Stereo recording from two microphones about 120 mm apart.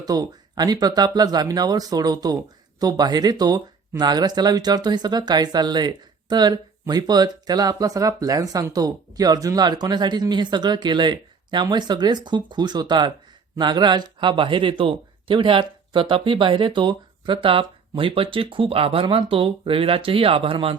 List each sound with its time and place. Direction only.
0.0 s speech: 30° right (ahead or behind); by 20.7 s 50° right (ahead or behind)